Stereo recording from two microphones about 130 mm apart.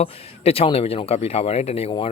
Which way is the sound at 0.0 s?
50° left (ahead or behind).